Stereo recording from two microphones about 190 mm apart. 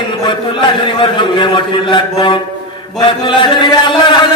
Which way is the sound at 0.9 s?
25° left (ahead or behind).